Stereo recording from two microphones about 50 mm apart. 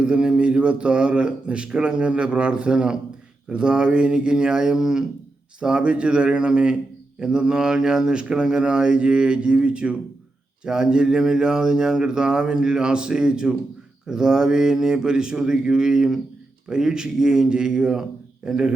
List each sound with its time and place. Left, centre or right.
0.0 s a man's voice: centre